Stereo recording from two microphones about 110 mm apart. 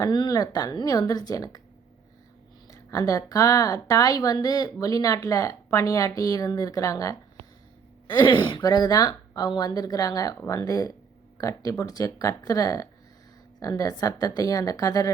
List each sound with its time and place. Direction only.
0.0 s speech: 40° left (ahead or behind)
2.6 s speech: 30° left (ahead or behind)
8.0 s speech: 45° left (ahead or behind)
8.6 s speech: 35° left (ahead or behind)